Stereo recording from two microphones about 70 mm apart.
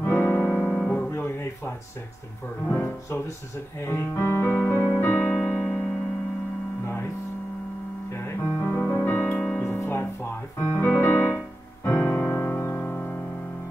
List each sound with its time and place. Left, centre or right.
0.0 s keyboard: left
0.7 s music: centre
1.1 s music: left
2.7 s speech: left
4.6 s keyboard: left
5.4 s music: centre
8.1 s music: left; by 9.6 s centre
9.6 s music: left